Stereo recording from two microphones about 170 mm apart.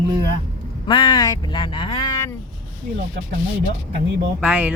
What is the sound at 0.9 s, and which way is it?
Speech, 25° left (ahead or behind).